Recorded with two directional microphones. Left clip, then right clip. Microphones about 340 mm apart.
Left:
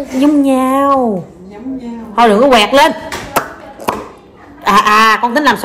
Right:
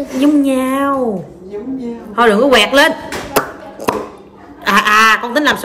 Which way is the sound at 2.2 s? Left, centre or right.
Centre.